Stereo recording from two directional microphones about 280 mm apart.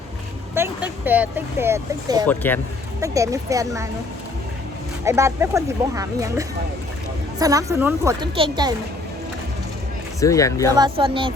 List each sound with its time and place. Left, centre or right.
0.5 s speech: centre
2.2 s speech: centre
3.0 s speech: centre
5.0 s speech: centre
10.2 s speech: centre
10.7 s speech: centre